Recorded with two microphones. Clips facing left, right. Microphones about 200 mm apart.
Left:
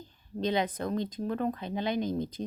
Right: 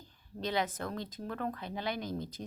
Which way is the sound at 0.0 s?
20° left (ahead or behind).